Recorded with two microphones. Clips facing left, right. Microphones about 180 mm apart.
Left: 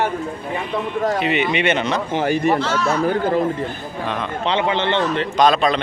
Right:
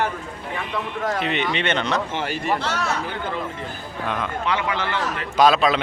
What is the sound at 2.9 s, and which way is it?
Speech, 40° left (ahead or behind).